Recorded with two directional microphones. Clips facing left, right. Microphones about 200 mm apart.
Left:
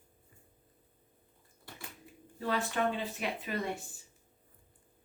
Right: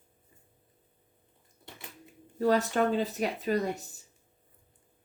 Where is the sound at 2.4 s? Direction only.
40° right (ahead or behind).